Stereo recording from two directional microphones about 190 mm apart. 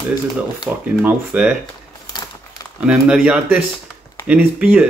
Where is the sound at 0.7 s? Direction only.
5° right (ahead or behind).